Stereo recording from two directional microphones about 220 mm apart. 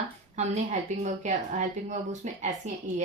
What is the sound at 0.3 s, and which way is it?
A woman's voice, 30° right (ahead or behind).